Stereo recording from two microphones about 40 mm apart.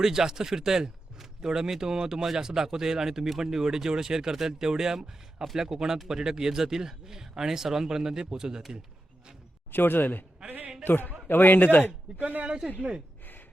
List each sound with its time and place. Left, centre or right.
0.0 s speech: centre
9.7 s a man's voice: left
12.2 s speech: right
12.5 s speech: right